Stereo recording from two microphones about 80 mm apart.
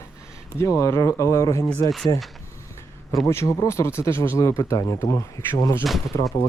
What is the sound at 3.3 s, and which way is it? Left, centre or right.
Speech, left.